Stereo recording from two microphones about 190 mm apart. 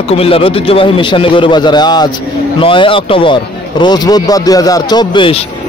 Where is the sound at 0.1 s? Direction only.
30° left (ahead or behind).